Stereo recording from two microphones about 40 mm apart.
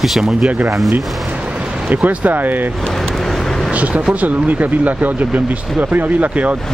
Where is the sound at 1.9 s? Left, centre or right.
Right.